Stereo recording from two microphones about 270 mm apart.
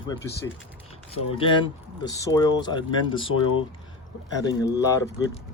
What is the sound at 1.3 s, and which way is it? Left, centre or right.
Speech, centre.